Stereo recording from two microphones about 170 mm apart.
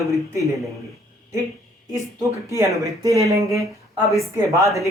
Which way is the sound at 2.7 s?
20° right (ahead or behind).